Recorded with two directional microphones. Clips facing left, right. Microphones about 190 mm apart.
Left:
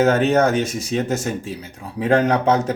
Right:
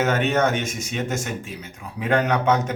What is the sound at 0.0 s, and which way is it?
Speech, 35° left (ahead or behind).